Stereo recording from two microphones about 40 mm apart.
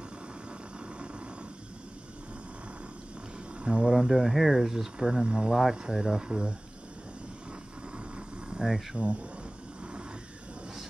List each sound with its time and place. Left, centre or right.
3.6 s speech: right
8.6 s speech: centre
8.9 s speech: right